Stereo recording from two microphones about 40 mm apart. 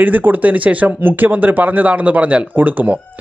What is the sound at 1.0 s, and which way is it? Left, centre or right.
Speech, right.